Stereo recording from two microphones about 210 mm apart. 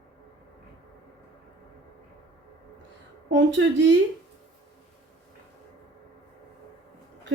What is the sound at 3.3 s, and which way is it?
Speech, 60° right (ahead or behind).